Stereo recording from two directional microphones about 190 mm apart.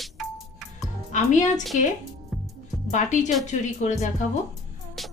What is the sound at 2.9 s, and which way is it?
Music, 40° left (ahead or behind).